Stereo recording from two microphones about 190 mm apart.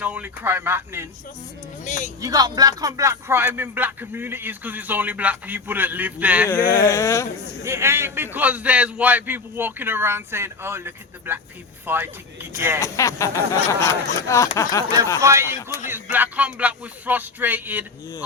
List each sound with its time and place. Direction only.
0.0 s speech: 10° right (ahead or behind)
1.8 s speech: 40° left (ahead or behind)
2.2 s speech: 20° right (ahead or behind)
6.5 s speech: 15° left (ahead or behind)
7.6 s speech: 15° right (ahead or behind)
12.8 s speech: 15° left (ahead or behind)
15.2 s speech: 15° right (ahead or behind)